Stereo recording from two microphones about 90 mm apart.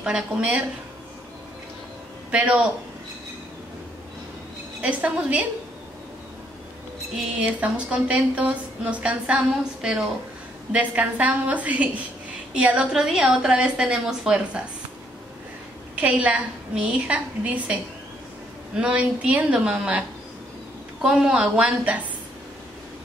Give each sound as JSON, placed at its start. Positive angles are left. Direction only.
{"t": 0.0, "sound": "a woman's voice", "side_deg": -10}
{"t": 2.3, "sound": "a woman's voice", "side_deg": -15}
{"t": 4.8, "sound": "a woman's voice", "side_deg": -15}
{"t": 7.3, "sound": "a woman's voice", "side_deg": -15}
{"t": 16.0, "sound": "a woman's voice", "side_deg": -15}
{"t": 18.8, "sound": "a woman's voice", "side_deg": -10}